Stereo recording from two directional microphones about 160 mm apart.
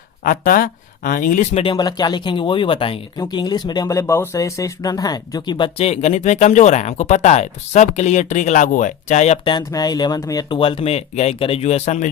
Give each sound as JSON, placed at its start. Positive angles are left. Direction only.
{"t": 0.3, "sound": "speech", "side_deg": 60}
{"t": 1.6, "sound": "speech", "side_deg": 25}